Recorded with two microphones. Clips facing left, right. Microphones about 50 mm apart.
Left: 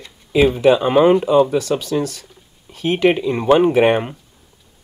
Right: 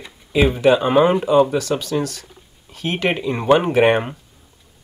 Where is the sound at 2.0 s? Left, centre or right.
Right.